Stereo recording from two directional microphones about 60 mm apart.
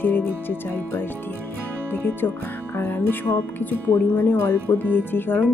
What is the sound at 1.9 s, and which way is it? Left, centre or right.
Speech, left.